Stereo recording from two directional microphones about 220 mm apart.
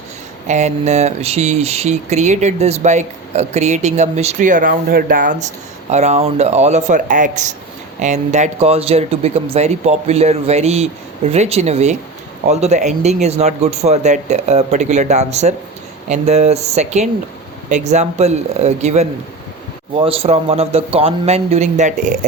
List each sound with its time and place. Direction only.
0.4 s speech: 30° right (ahead or behind)